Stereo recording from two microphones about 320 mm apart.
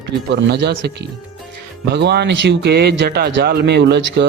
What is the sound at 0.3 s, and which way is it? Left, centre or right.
A man's voice, right.